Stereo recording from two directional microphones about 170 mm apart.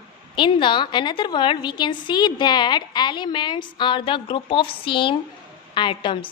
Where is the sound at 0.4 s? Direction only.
30° left (ahead or behind).